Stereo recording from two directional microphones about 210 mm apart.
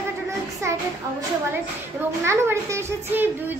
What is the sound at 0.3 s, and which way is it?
Child singing, 15° right (ahead or behind).